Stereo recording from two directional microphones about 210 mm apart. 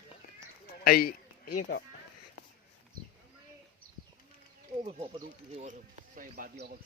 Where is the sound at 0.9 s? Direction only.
45° left (ahead or behind).